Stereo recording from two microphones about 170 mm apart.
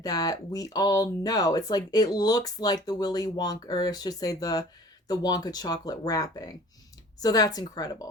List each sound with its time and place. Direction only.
0.0 s speech: 20° left (ahead or behind)